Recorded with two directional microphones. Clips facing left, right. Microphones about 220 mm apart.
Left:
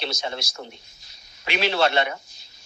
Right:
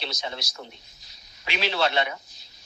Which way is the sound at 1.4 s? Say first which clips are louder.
Left 4 dB; 60° left (ahead or behind).